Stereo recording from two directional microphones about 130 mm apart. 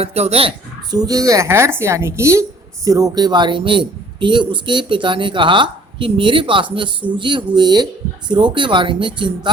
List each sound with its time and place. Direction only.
0.0 s speech: 55° right (ahead or behind)
0.9 s a woman's voice: 30° right (ahead or behind)